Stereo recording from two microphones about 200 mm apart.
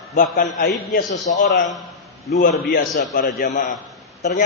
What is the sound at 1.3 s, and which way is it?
A man's voice, 40° left (ahead or behind).